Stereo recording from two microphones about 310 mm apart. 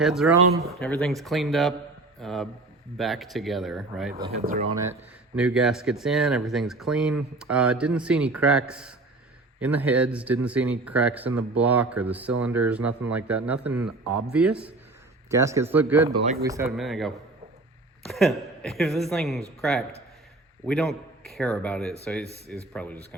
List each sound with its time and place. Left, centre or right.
0.0 s a man's voice: centre
4.1 s speech: centre
5.4 s speech: centre
14.0 s speech: right
14.3 s a man's voice: centre
16.0 s speech: right
16.4 s speech: centre
18.1 s speech: centre
20.7 s speech: centre